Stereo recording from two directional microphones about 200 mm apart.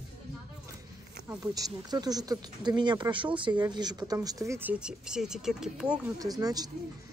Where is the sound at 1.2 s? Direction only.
15° right (ahead or behind).